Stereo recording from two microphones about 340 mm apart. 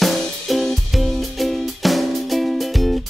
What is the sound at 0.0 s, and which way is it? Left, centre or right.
Music, centre.